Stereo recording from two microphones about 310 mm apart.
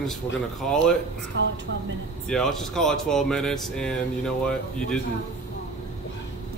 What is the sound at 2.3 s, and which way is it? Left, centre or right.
Speech, centre.